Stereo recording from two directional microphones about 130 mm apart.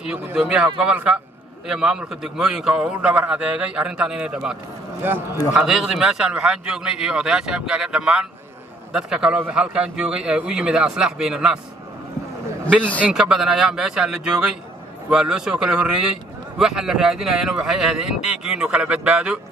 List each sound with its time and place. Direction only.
0.0 s a man's voice: 10° right (ahead or behind)
5.0 s a man's voice: 15° right (ahead or behind)
5.5 s a man's voice: 5° right (ahead or behind)
13.0 s a man's voice: 5° right (ahead or behind)